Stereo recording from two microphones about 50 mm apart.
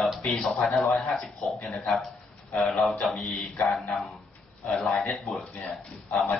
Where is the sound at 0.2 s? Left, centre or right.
Centre.